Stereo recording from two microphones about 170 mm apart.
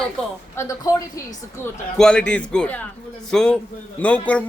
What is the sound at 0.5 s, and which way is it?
A woman's voice, 20° left (ahead or behind).